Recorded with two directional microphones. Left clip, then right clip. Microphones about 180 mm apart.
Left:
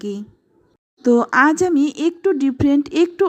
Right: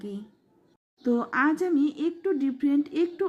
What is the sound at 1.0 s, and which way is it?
Speech, 35° left (ahead or behind).